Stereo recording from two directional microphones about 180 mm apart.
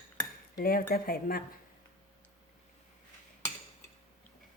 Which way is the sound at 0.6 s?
55° left (ahead or behind).